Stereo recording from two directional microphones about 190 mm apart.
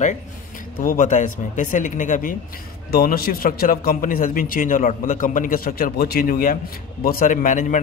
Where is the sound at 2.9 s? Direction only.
55° left (ahead or behind).